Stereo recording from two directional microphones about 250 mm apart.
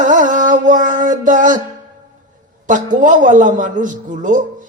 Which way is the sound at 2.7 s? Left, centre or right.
Right.